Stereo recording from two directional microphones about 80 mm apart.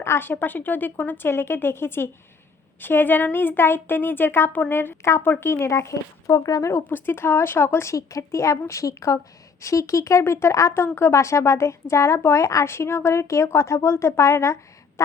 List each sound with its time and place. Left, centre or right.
0.0 s a woman's voice: left
6.8 s a woman's voice: left